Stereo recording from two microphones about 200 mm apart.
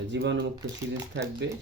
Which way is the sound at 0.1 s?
65° right (ahead or behind).